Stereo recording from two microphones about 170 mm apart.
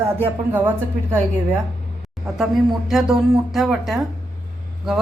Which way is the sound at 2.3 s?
Centre (ahead or behind).